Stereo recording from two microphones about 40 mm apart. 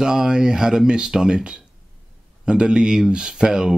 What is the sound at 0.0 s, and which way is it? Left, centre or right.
Speech, centre.